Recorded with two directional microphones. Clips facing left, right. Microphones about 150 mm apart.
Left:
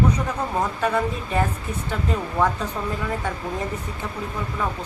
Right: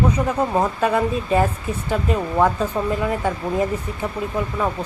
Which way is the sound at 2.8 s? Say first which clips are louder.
Right 6 dB; 20° right (ahead or behind).